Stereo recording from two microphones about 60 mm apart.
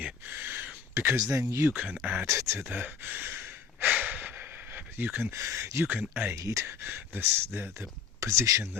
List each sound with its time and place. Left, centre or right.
0.0 s a sound: right
0.9 s speech: right
1.7 s speech: right
2.2 s speech: right
2.6 s speech: right
3.9 s a sound: right
5.3 s speech: right
5.8 s speech: right
6.3 s speech: right
6.7 s speech: right
8.2 s speech: right